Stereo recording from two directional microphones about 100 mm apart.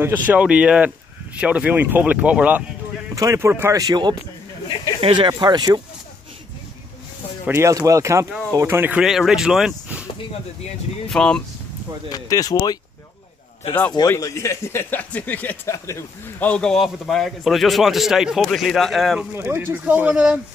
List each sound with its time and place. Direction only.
0.0 s speech: 15° right (ahead or behind)
3.2 s speech: 30° right (ahead or behind)
3.8 s speech: 40° right (ahead or behind)
5.0 s speech: 55° right (ahead or behind)
7.4 s speech: 25° right (ahead or behind)
8.9 s a man's voice: 5° right (ahead or behind)
9.7 s a sound: 15° right (ahead or behind)
11.1 s speech: 5° left (ahead or behind)
12.1 s speech: 40° left (ahead or behind)
14.2 s a man's voice: 30° left (ahead or behind); by 19.2 s centre (ahead or behind)
19.3 s speech: 25° right (ahead or behind)